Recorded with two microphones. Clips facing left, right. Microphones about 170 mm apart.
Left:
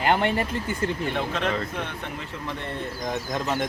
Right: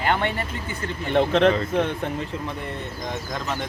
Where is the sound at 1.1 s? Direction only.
30° right (ahead or behind).